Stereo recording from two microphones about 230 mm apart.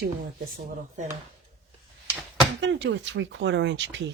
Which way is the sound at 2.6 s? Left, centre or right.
Right.